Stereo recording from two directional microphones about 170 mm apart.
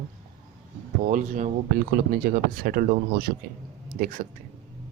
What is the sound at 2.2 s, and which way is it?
Speech, 60° right (ahead or behind).